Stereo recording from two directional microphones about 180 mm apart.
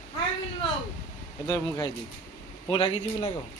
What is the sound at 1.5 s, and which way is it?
A man's voice, 20° left (ahead or behind).